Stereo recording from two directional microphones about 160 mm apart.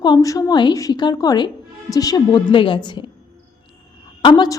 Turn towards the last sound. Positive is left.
turn(degrees=25)  # may be behind; listen again after turning